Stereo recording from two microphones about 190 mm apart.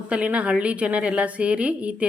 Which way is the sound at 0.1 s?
5° right (ahead or behind).